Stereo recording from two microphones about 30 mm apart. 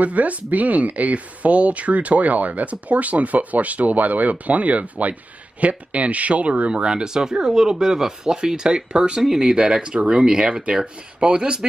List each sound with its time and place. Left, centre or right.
0.0 s speech: right
6.7 s speech: right